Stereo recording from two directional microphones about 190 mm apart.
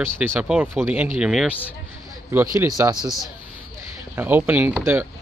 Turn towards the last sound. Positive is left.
turn(degrees=-10)  # may be behind; listen again after turning